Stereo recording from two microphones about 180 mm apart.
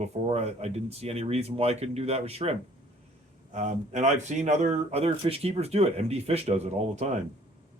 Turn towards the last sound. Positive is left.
turn(degrees=-40)  # may be behind; listen again after turning